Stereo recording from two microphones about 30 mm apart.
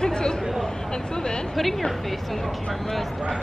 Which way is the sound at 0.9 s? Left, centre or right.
Left.